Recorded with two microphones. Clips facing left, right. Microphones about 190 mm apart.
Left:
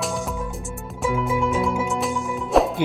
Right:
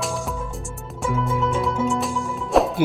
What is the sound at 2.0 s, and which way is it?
Music, centre (ahead or behind).